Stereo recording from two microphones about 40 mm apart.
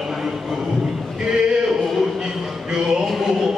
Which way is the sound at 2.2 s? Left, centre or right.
Centre.